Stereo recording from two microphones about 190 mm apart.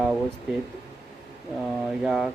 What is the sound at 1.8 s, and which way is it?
Speech, centre (ahead or behind).